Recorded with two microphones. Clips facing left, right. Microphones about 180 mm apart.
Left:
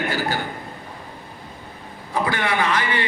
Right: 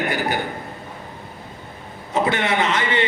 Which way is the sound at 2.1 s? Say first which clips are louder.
Right 2 dB; 25° right (ahead or behind).